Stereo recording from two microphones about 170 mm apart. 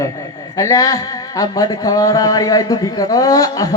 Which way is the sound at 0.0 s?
20° left (ahead or behind).